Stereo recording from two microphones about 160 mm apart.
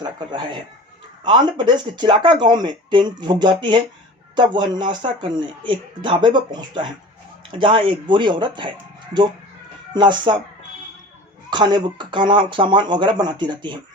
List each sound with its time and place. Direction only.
0.0 s speech: 30° right (ahead or behind)
9.9 s speech: 30° right (ahead or behind)
11.5 s speech: 30° right (ahead or behind)